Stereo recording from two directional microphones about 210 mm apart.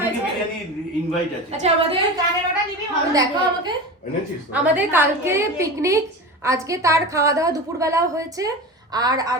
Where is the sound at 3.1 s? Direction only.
20° right (ahead or behind).